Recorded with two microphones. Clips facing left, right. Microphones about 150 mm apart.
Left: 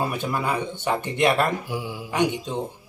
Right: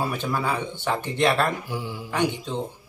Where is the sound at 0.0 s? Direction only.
15° left (ahead or behind).